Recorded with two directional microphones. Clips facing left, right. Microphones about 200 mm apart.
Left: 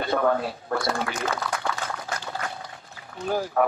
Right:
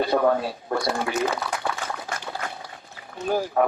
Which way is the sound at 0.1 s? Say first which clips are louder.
Left 1 dB; 20° right (ahead or behind).